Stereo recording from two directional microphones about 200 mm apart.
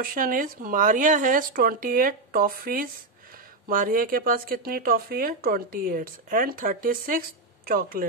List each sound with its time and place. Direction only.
0.0 s speech: 45° right (ahead or behind)